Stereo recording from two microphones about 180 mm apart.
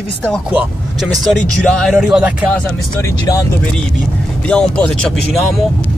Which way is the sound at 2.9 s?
15° left (ahead or behind).